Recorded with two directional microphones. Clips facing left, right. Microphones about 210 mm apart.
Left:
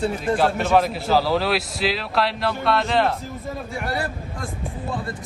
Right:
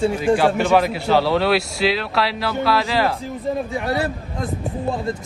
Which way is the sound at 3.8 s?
20° right (ahead or behind).